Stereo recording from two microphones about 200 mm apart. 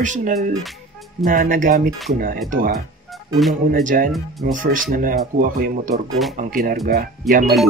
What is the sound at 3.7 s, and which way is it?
Speech, 45° right (ahead or behind).